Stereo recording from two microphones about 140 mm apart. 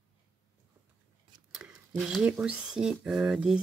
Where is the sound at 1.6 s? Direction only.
5° right (ahead or behind).